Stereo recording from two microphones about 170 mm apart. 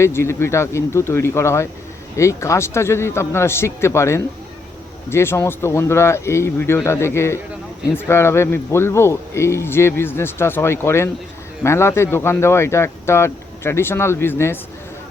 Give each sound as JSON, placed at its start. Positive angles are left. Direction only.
{"t": 0.0, "sound": "speech", "side_deg": 15}